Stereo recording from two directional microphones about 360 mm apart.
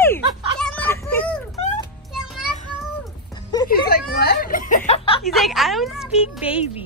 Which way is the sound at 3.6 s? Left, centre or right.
Left.